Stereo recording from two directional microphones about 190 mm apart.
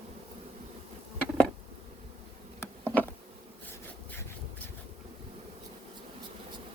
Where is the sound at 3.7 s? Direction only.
10° left (ahead or behind).